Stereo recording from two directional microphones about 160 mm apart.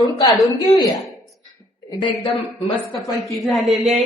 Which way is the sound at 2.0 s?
35° left (ahead or behind).